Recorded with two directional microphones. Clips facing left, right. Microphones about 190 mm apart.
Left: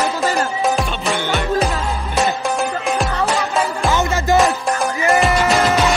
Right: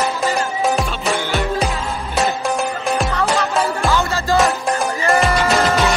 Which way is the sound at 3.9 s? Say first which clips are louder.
Left 1 dB; 20° left (ahead or behind).